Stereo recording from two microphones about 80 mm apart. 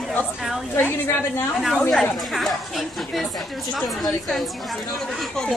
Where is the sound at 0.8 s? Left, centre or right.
Left.